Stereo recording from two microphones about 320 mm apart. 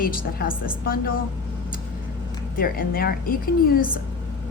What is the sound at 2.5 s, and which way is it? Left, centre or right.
A woman's voice, left.